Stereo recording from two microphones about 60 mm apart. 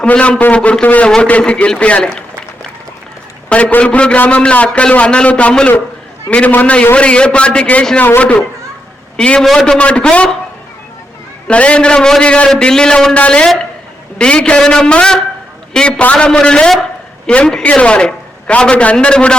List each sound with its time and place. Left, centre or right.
0.0 s a man's voice: left
3.5 s a man's voice: left
7.9 s a man's voice: left
8.2 s a man's voice: left
9.4 s a man's voice: centre
9.7 s a man's voice: centre
11.4 s a man's voice: centre